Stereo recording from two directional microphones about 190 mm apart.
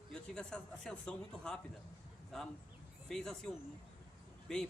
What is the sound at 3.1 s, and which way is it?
Speech, 5° left (ahead or behind).